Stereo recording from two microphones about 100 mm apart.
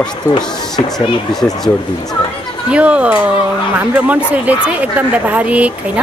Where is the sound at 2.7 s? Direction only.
10° right (ahead or behind).